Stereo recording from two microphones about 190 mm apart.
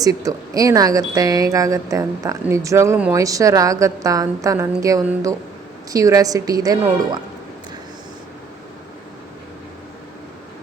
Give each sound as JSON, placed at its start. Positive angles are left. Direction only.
{"t": 0.0, "sound": "a woman's voice", "side_deg": -20}